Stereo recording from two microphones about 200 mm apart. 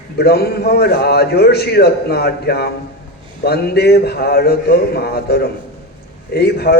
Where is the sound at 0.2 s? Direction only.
50° left (ahead or behind).